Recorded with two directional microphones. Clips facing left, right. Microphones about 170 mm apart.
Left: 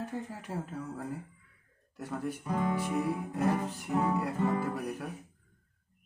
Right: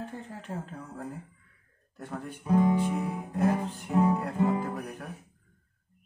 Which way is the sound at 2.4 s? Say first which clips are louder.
Right 9 dB; 20° right (ahead or behind).